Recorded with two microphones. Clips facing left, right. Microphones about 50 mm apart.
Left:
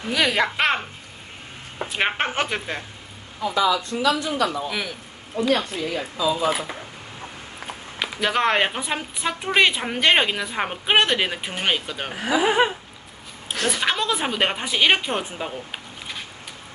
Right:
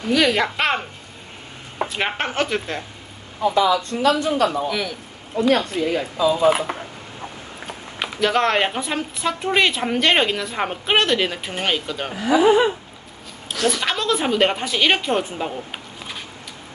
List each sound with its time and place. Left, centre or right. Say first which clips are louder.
0.1 s a woman's voice: right 3 dB; centre
1.9 s a woman's voice: left 3 dB; centre
3.4 s speech: right 3 dB; right
4.7 s a woman's voice: right 3 dB; centre
5.4 s speech: right 4 dB; right
8.2 s a woman's voice: right 2 dB; centre
13.5 s speech: right 3 dB; left
13.8 s a woman's voice: right 2 dB; centre